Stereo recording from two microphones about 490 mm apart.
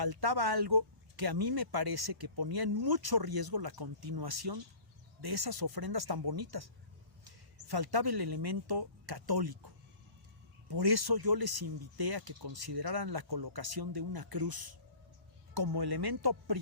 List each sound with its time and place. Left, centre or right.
0.0 s speech: right
10.7 s speech: right